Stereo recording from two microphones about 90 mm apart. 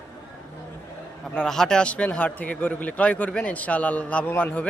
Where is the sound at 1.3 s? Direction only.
5° left (ahead or behind).